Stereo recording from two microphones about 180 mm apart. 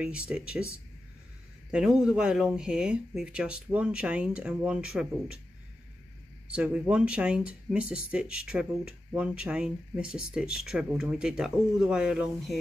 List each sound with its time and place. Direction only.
0.0 s speech: 5° right (ahead or behind)
1.7 s speech: 5° right (ahead or behind)
6.4 s speech: 5° right (ahead or behind)